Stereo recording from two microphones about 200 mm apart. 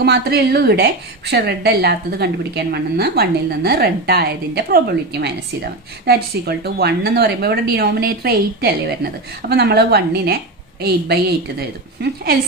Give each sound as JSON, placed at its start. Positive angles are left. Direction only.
{"t": 0.0, "sound": "a woman's voice", "side_deg": -55}